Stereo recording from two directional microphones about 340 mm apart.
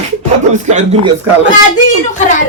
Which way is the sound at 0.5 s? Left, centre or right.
Right.